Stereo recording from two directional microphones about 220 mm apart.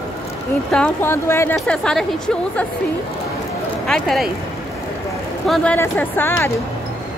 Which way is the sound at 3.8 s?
Centre (ahead or behind).